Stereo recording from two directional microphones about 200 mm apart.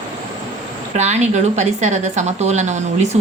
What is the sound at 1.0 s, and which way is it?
A woman's voice, 35° right (ahead or behind).